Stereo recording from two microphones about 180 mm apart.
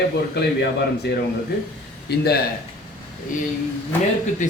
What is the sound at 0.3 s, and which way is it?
A man's voice, 65° left (ahead or behind).